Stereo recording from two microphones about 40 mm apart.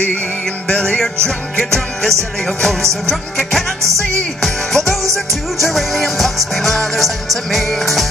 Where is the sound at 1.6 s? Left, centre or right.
Centre.